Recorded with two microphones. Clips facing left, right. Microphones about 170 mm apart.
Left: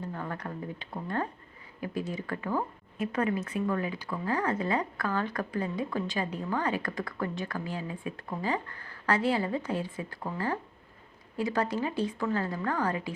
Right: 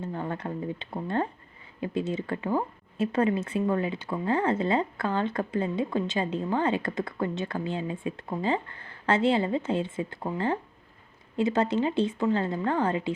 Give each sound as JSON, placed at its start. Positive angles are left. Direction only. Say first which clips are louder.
{"t": 0.0, "sound": "speech", "louder": "right 4 dB", "side_deg": -25}